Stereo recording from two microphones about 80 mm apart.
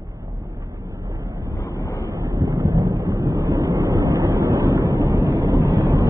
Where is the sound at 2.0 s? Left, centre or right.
Right.